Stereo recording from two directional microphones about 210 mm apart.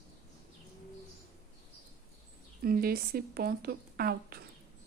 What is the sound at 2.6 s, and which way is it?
Speech, 45° right (ahead or behind).